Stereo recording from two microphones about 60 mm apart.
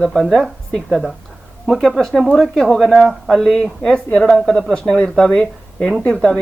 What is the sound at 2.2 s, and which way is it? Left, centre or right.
Speech, centre.